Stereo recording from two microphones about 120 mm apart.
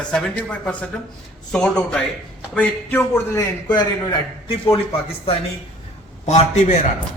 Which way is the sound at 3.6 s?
35° left (ahead or behind).